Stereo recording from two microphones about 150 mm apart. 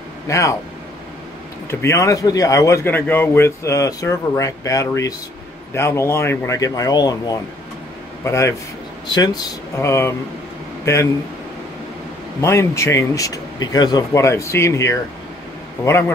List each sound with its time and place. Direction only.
0.3 s speech: 20° left (ahead or behind)
1.7 s speech: 20° left (ahead or behind)
12.4 s speech: 20° left (ahead or behind)